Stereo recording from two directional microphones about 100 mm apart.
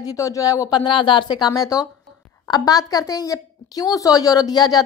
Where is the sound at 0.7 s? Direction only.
50° left (ahead or behind).